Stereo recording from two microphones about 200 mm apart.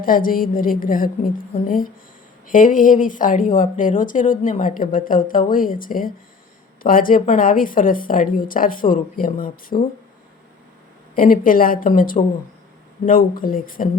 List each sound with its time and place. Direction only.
0.0 s speech: 45° left (ahead or behind)
11.1 s speech: 45° left (ahead or behind)